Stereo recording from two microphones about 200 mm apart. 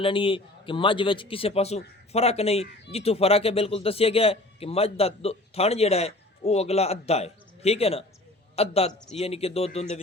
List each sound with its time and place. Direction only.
0.0 s a man's voice: 25° left (ahead or behind)